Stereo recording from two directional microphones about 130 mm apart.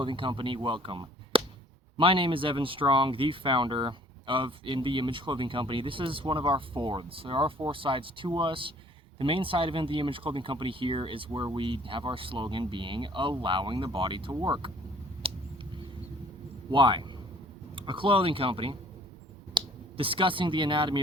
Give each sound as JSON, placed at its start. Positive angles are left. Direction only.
{"t": 0.0, "sound": "speech", "side_deg": -40}
{"t": 15.2, "sound": "a sound", "side_deg": -45}
{"t": 16.7, "sound": "speech", "side_deg": -40}